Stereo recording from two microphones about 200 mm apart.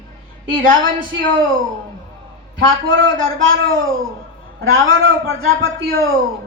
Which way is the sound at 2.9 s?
80° right.